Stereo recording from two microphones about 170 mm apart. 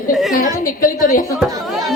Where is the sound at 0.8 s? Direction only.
55° left (ahead or behind).